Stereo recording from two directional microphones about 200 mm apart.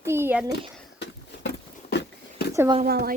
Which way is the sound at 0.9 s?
60° left (ahead or behind).